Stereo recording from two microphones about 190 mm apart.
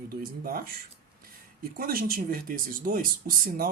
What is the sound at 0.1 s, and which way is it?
Speech, 50° right (ahead or behind).